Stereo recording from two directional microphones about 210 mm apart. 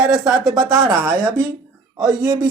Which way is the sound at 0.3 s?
20° right (ahead or behind).